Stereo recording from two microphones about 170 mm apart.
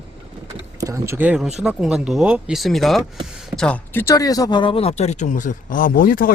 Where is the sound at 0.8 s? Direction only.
20° right (ahead or behind).